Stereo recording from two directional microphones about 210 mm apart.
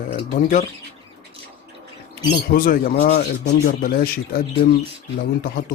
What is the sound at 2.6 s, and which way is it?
Speech, 45° left (ahead or behind).